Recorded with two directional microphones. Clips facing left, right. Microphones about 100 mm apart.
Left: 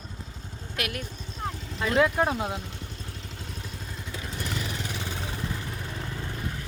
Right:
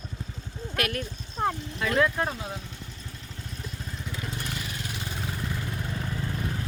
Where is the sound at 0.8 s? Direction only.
15° left (ahead or behind).